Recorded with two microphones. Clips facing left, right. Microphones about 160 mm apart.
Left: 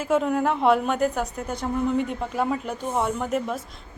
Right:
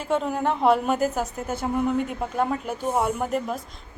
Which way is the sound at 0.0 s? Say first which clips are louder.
Left 2 dB; centre (ahead or behind).